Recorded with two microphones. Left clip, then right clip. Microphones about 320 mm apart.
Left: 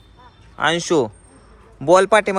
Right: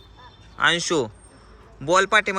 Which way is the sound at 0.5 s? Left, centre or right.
Centre.